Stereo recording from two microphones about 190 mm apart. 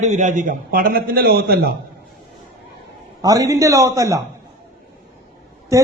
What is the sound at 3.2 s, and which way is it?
A man's voice, 20° right (ahead or behind).